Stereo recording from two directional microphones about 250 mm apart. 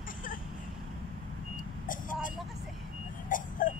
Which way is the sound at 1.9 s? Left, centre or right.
Left.